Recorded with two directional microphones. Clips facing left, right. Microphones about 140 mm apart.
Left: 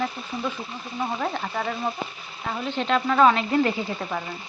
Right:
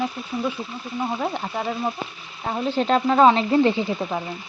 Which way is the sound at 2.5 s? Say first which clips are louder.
Right 4 dB; 35° right (ahead or behind).